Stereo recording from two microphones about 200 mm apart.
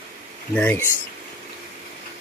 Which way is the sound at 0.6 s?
10° left (ahead or behind).